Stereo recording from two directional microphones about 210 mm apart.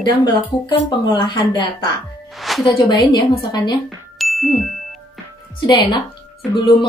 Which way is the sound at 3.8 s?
Centre (ahead or behind).